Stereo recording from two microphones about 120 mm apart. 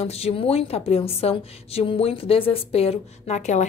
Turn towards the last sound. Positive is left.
turn(degrees=80)